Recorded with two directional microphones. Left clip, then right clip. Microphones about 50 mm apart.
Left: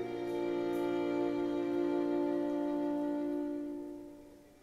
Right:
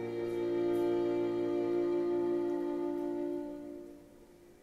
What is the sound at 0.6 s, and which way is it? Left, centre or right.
Music, left.